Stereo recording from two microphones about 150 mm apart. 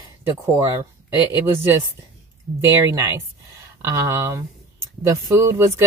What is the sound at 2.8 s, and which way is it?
Speech, 20° right (ahead or behind).